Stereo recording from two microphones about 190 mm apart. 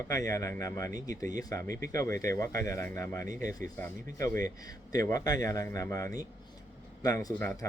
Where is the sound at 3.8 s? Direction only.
15° left (ahead or behind).